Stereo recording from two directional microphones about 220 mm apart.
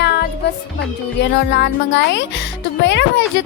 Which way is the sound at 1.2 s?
55° left (ahead or behind).